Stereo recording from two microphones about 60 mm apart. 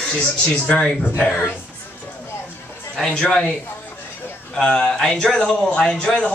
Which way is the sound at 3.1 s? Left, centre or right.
Centre.